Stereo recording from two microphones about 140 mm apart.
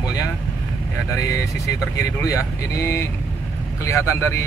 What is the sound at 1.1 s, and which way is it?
Speech, 25° left (ahead or behind).